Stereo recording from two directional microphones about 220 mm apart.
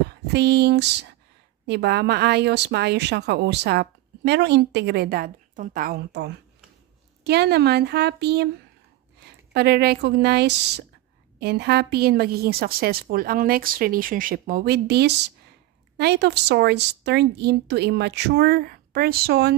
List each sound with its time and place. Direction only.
0.1 s a woman's voice: 50° right (ahead or behind)